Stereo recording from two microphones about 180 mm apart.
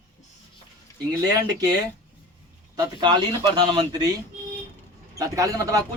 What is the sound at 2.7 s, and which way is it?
Speech, 25° right (ahead or behind).